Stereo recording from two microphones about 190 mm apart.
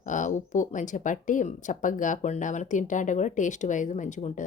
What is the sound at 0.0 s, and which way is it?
Speech, 40° left (ahead or behind).